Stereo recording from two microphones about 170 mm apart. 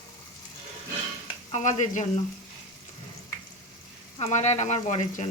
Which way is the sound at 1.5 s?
45° left (ahead or behind).